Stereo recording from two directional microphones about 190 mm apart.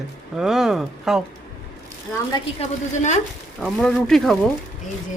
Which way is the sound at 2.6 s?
40° left (ahead or behind).